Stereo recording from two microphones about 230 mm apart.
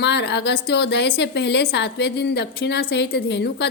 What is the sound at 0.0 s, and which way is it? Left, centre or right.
A woman's voice, left.